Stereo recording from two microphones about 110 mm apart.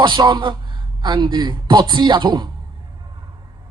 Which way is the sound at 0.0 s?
45° right (ahead or behind).